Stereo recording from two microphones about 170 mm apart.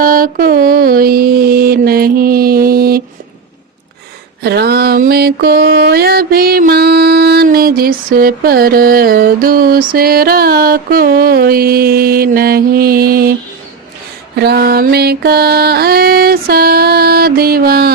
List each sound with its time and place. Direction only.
0.0 s mantra: 55° right (ahead or behind)
4.4 s mantra: 70° right (ahead or behind)
7.4 s music: 60° right (ahead or behind)
14.3 s music: 70° right (ahead or behind)